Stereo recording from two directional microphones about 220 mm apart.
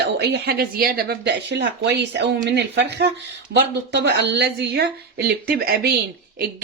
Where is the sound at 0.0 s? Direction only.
50° right (ahead or behind).